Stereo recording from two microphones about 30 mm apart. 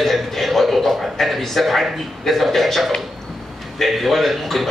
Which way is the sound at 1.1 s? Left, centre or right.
Centre.